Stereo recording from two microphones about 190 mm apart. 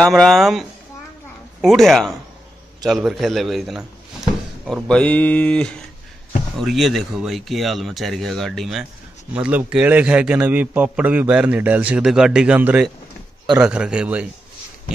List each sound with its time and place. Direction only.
0.0 s a man's voice: centre (ahead or behind)